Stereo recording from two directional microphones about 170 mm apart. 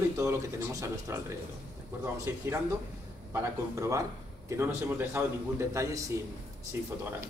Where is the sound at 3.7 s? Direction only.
20° right (ahead or behind).